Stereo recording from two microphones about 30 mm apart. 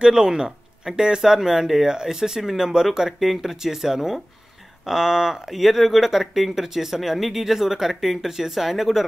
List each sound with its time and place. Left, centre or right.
0.0 s speech: right
5.5 s speech: centre